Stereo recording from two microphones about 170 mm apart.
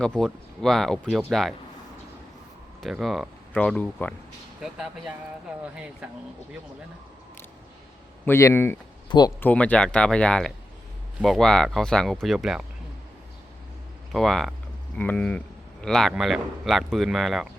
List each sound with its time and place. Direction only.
0.0 s speech: 5° left (ahead or behind)
2.8 s speech: centre (ahead or behind)
4.6 s speech: 5° right (ahead or behind)
8.2 s speech: 15° left (ahead or behind)
9.0 s speech: 25° left (ahead or behind)
9.4 s speech: 10° left (ahead or behind)
14.1 s speech: centre (ahead or behind)